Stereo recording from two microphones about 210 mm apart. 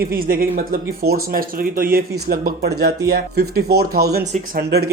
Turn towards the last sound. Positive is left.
turn(degrees=-50)  # may be behind; listen again after turning